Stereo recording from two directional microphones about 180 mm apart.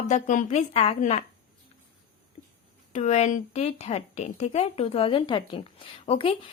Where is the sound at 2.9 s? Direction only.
40° left (ahead or behind).